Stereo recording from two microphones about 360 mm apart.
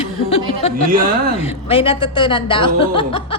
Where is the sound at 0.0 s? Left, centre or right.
Centre.